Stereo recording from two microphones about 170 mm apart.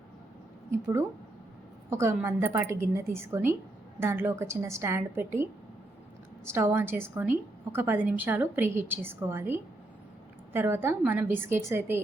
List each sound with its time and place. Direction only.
0.7 s a woman's voice: 15° right (ahead or behind)